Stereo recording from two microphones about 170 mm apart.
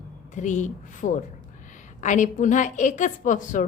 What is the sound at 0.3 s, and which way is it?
A woman's voice, 45° left (ahead or behind).